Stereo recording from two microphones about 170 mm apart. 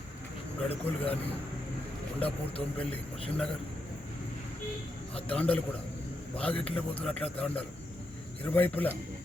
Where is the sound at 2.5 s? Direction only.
35° left (ahead or behind).